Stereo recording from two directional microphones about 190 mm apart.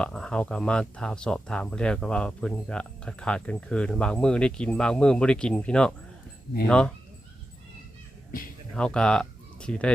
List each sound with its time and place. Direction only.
0.0 s speech: 5° left (ahead or behind)
8.3 s crow: 50° left (ahead or behind)
8.7 s speech: 5° left (ahead or behind)